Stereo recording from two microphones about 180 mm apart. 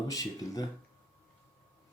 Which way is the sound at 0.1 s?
20° left (ahead or behind).